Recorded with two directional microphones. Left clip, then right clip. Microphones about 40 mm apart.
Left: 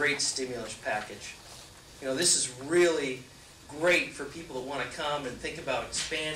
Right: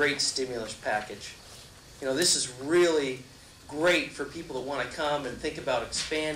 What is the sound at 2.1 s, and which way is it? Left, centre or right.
A man's voice, right.